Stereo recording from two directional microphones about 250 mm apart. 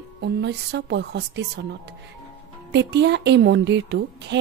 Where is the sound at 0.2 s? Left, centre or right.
Right.